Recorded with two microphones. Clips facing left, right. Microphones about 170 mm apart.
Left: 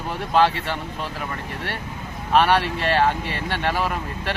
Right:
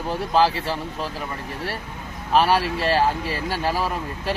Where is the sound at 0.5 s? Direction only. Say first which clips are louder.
Right 1 dB; 30° right (ahead or behind).